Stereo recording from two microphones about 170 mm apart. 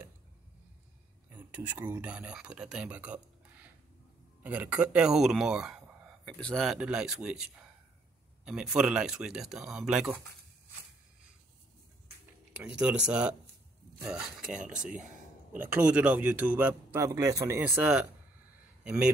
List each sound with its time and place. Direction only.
1.3 s speech: 10° right (ahead or behind)
12.5 s speech: 5° right (ahead or behind)
14.8 s speech: 50° right (ahead or behind)
15.7 s speech: 5° right (ahead or behind)